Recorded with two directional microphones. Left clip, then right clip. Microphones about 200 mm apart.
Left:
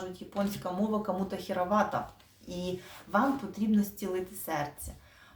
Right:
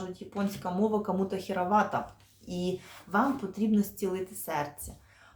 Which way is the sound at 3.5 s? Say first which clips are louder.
Right 1 dB; 15° right (ahead or behind).